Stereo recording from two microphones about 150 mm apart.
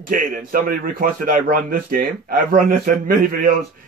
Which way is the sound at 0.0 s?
65° right (ahead or behind).